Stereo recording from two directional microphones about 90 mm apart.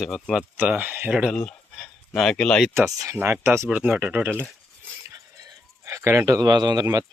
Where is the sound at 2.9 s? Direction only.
40° right (ahead or behind).